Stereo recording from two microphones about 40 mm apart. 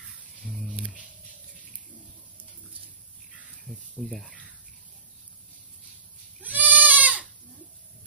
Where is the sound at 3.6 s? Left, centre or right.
Centre.